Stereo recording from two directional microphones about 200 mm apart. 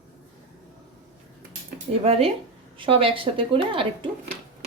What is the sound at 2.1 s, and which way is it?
Speech, 30° right (ahead or behind).